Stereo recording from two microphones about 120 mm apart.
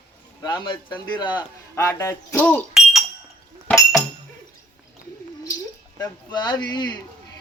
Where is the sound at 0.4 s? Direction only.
40° left (ahead or behind).